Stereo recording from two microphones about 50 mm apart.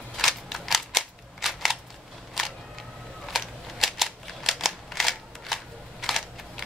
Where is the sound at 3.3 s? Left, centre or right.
Centre.